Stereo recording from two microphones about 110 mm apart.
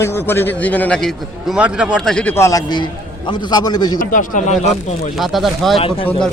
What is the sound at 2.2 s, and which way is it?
Speech, 25° left (ahead or behind).